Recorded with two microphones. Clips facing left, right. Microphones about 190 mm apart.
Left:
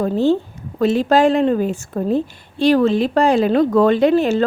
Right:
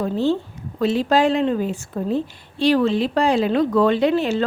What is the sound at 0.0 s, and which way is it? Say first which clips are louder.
A woman's voice: left 4 dB; 50° left (ahead or behind).